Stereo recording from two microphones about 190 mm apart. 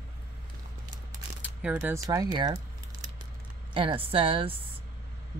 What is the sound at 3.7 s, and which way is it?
Speech, 25° right (ahead or behind).